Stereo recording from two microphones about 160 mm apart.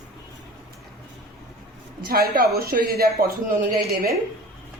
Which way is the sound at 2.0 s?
70° right (ahead or behind).